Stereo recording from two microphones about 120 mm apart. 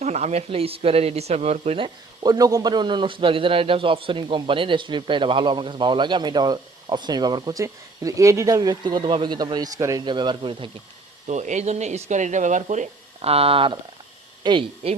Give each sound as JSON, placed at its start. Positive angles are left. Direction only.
{"t": 0.0, "sound": "speech", "side_deg": -65}
{"t": 1.8, "sound": "a man's voice", "side_deg": -35}
{"t": 11.3, "sound": "speech", "side_deg": -80}
{"t": 13.3, "sound": "speech", "side_deg": -50}
{"t": 14.4, "sound": "a man's voice", "side_deg": -40}